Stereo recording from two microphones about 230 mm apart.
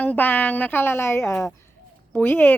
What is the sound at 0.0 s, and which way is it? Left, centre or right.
Speech, centre.